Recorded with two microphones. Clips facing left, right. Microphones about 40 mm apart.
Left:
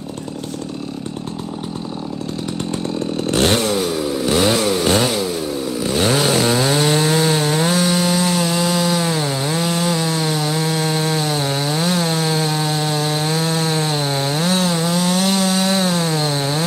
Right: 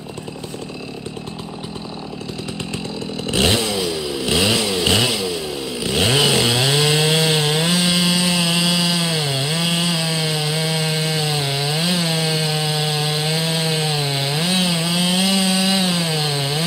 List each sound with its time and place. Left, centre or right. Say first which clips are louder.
3.6 s chainsaw: left 3 dB; right
12.7 s sawing: left 2 dB; right
13.9 s wood: left 2 dB; right